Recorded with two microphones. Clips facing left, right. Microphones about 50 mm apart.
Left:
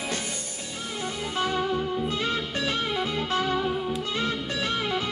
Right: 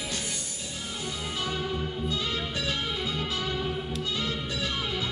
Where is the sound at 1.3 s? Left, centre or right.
Left.